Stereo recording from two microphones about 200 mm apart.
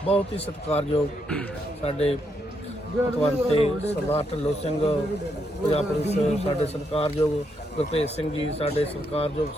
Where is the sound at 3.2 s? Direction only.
30° left (ahead or behind).